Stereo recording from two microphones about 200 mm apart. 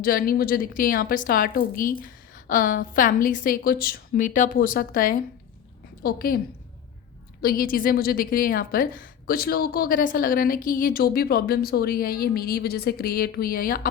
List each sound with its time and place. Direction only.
0.0 s a woman's voice: 45° left (ahead or behind)
7.4 s a woman's voice: 45° left (ahead or behind)